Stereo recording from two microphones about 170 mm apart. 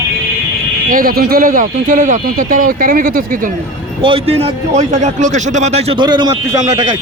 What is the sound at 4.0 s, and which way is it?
A man's voice, 30° right (ahead or behind).